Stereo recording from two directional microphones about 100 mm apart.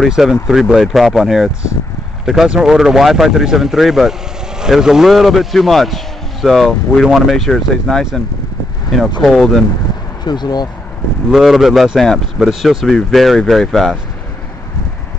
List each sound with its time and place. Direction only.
0.0 s a man's voice: centre (ahead or behind)
9.2 s a man's voice: 5° left (ahead or behind)
10.2 s speech: 45° left (ahead or behind)
11.2 s a man's voice: centre (ahead or behind)